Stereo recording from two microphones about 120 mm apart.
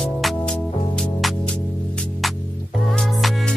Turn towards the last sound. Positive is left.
turn(degrees=0)  # may be behind; listen again after turning